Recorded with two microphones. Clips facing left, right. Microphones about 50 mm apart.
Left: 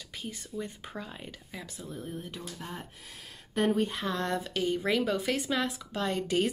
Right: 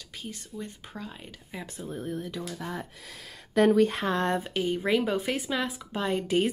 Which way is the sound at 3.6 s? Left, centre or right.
Right.